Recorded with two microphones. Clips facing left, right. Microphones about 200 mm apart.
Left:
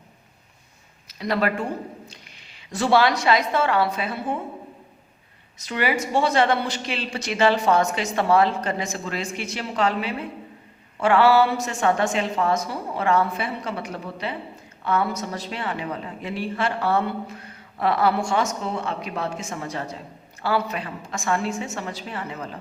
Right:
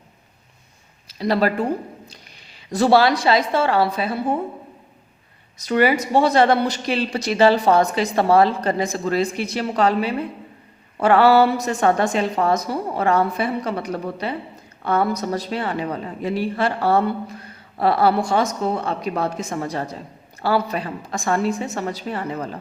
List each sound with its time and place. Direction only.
1.0 s a woman's voice: 30° right (ahead or behind)
5.5 s a woman's voice: 40° right (ahead or behind)